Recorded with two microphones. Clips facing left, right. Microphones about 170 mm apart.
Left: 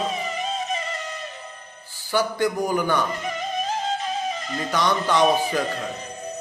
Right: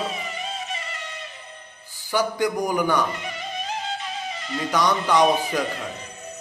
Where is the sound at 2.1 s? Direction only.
15° right (ahead or behind).